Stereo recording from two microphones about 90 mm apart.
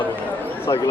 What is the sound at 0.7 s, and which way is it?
Speech, 40° left (ahead or behind).